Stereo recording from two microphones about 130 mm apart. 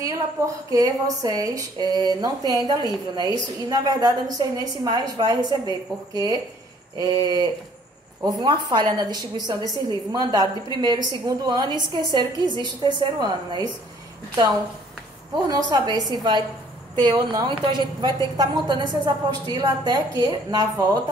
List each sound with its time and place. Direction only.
0.7 s a woman's voice: 25° right (ahead or behind)
15.4 s a woman's voice: 30° right (ahead or behind)